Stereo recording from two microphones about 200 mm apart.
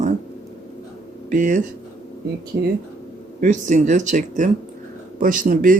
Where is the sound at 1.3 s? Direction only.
40° right (ahead or behind).